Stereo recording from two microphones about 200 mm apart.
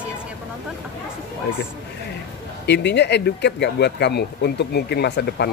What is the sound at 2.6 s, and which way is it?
Speech, 55° left (ahead or behind).